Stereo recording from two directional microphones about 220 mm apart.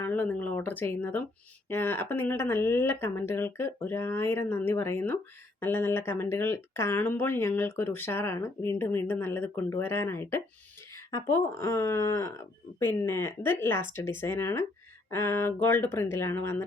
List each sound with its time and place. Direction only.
0.0 s speech: 5° left (ahead or behind)